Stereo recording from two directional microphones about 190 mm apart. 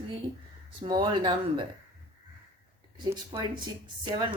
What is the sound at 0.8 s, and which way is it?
Speech, 25° right (ahead or behind).